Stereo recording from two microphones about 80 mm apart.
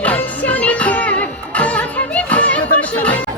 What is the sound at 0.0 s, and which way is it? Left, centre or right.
Music, centre.